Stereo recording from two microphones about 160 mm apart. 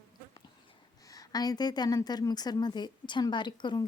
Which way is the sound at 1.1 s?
25° left (ahead or behind).